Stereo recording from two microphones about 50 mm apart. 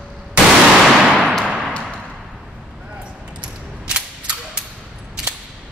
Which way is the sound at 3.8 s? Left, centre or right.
Right.